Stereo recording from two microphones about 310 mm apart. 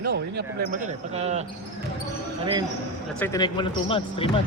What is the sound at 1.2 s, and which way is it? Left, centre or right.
Speech, right.